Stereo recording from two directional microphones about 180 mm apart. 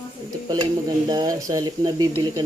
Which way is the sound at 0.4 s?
25° right (ahead or behind).